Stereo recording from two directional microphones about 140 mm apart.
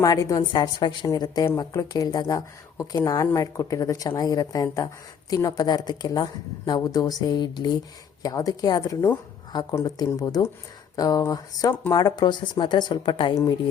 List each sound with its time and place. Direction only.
0.0 s speech: 25° left (ahead or behind)
11.7 s speech: 15° left (ahead or behind)
11.9 s speech: 30° left (ahead or behind)